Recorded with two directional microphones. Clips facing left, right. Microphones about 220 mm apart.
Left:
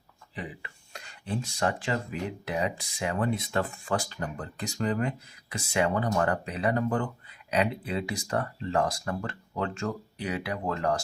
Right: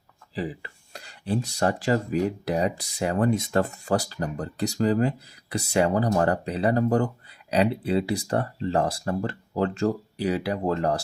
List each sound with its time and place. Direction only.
0.3 s speech: 35° right (ahead or behind)